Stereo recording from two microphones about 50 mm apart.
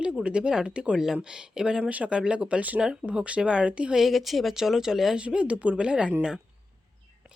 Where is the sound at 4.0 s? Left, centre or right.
Centre.